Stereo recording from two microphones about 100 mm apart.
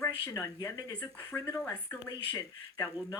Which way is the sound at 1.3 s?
30° left (ahead or behind).